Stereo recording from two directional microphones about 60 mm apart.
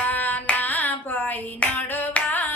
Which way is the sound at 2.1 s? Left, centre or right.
Left.